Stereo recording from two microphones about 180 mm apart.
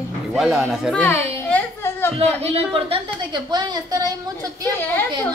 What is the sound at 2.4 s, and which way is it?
A woman's voice, 30° right (ahead or behind).